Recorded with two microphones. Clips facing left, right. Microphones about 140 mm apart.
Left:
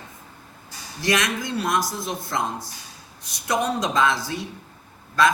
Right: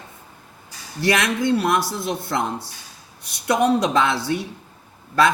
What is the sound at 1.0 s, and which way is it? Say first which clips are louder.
Speech: right 3 dB; 60° right (ahead or behind).